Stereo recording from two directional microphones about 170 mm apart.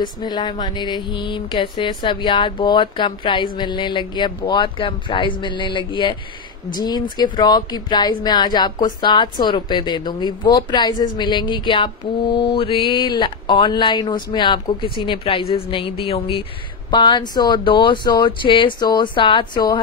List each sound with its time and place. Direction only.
0.0 s speech: 25° left (ahead or behind)